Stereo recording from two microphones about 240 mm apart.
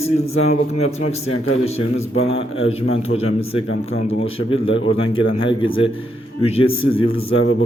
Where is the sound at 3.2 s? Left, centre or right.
Left.